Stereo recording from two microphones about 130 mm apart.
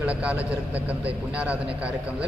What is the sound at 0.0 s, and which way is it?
A man's voice, 10° right (ahead or behind).